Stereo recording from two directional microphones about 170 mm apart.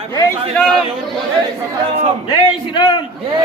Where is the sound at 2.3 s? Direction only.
25° left (ahead or behind).